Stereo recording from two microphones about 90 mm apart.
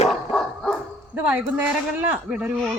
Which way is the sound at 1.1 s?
15° right (ahead or behind).